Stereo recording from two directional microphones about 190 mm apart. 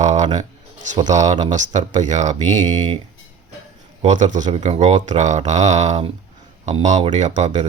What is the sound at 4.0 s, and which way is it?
Speech, 40° right (ahead or behind).